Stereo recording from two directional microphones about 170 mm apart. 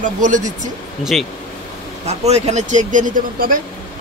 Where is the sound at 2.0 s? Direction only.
40° right (ahead or behind).